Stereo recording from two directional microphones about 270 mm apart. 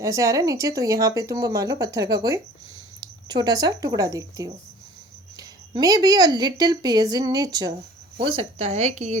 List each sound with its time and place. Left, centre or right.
0.0 s a woman's voice: centre